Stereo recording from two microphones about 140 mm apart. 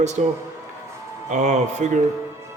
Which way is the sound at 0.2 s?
60° right (ahead or behind).